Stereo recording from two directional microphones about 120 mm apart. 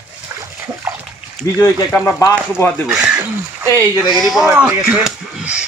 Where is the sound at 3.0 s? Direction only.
15° right (ahead or behind).